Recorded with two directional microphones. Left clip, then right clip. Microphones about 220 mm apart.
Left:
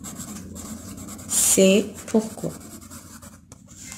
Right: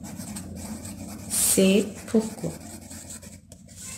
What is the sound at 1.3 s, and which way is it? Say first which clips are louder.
Speech: left 4 dB; 25° left (ahead or behind).